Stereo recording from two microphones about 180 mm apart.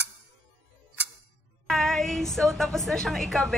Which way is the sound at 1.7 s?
Centre (ahead or behind).